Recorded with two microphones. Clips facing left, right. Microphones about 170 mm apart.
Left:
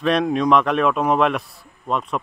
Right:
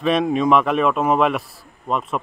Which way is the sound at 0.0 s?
Centre (ahead or behind).